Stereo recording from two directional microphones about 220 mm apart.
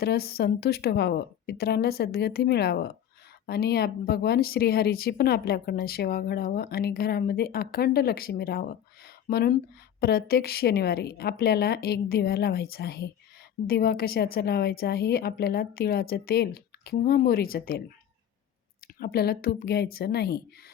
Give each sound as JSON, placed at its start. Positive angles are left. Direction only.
{"t": 0.0, "sound": "speech", "side_deg": 45}
{"t": 18.9, "sound": "speech", "side_deg": 45}